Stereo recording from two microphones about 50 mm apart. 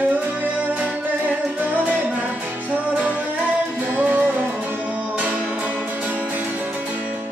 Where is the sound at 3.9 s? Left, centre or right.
Right.